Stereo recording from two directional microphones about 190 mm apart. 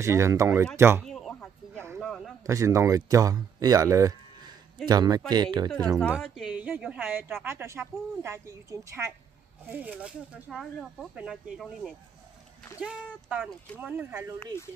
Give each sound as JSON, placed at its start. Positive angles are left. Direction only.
{"t": 0.0, "sound": "speech", "side_deg": -15}
{"t": 1.0, "sound": "a sound", "side_deg": 0}
{"t": 2.4, "sound": "speech", "side_deg": -15}
{"t": 5.9, "sound": "speech", "side_deg": 0}